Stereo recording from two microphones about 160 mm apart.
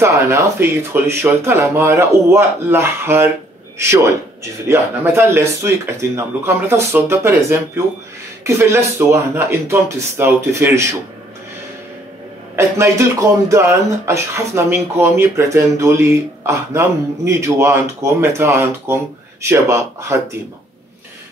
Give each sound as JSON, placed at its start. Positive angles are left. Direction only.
{"t": 0.0, "sound": "speech", "side_deg": -15}
{"t": 12.5, "sound": "speech", "side_deg": -15}